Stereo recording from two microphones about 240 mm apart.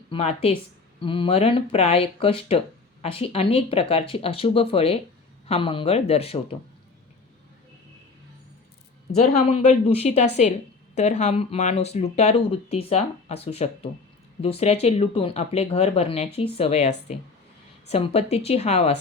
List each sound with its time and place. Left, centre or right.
0.1 s speech: left
9.1 s speech: left